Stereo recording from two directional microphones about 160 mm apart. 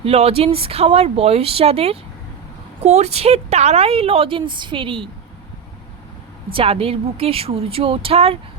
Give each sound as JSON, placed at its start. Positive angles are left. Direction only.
{"t": 0.0, "sound": "a woman's voice", "side_deg": -40}
{"t": 6.5, "sound": "a woman's voice", "side_deg": -35}